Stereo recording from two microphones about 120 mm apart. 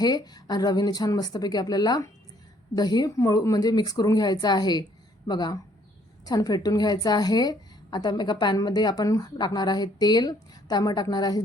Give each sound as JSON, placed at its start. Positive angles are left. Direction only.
{"t": 0.0, "sound": "a woman's voice", "side_deg": 35}